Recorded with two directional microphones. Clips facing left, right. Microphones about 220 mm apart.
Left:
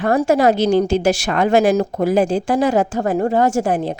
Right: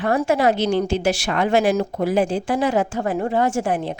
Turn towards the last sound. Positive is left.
turn(degrees=40)  # may be behind; listen again after turning